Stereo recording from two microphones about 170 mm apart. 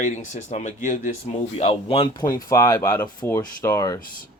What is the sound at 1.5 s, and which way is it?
A man's voice, 35° left (ahead or behind).